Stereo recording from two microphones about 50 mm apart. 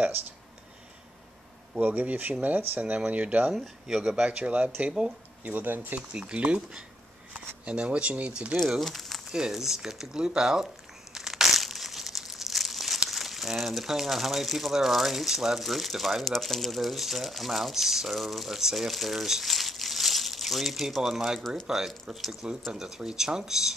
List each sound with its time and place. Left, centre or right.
1.8 s speech: right
3.8 s speech: centre
5.4 s speech: right
5.9 s speech: right
8.8 s speech: centre
9.3 s speech: centre
11.1 s crumpling: centre
13.1 s speech: centre